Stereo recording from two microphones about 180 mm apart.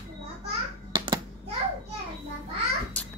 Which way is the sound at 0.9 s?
25° right (ahead or behind).